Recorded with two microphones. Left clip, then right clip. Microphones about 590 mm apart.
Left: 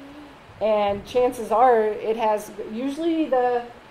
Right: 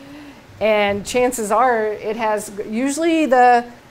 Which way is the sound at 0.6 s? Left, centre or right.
Right.